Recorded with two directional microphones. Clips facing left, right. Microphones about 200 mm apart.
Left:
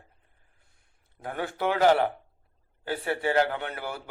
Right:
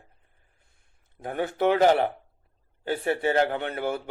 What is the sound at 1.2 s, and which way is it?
A man's voice, 20° right (ahead or behind).